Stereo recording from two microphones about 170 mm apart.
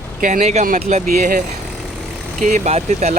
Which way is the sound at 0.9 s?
50° right (ahead or behind).